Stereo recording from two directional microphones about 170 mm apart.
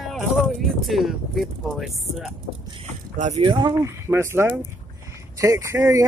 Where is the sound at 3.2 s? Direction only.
35° right (ahead or behind); by 6.0 s 15° right (ahead or behind).